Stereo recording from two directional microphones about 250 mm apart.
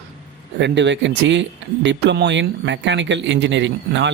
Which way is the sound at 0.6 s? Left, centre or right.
Right.